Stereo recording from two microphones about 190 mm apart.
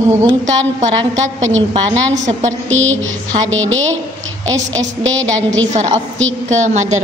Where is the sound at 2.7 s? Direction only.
90° right.